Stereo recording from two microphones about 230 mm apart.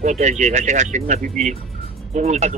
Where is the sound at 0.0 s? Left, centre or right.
Right.